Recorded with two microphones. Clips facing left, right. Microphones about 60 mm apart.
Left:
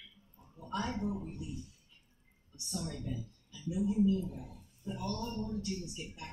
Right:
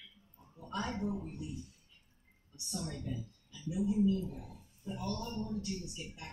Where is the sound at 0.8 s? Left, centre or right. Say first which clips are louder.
Even; centre.